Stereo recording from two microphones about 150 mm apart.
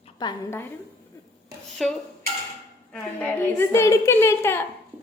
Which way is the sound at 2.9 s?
10° left (ahead or behind).